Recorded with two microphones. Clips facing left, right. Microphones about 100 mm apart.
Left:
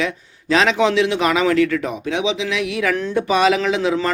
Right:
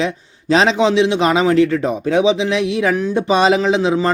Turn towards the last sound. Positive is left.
turn(degrees=-25)  # may be behind; listen again after turning